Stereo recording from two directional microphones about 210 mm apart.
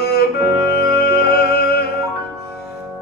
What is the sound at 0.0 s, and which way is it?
Music, 50° left (ahead or behind).